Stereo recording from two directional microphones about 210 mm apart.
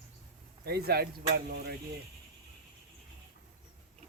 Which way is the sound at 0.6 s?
50° right (ahead or behind).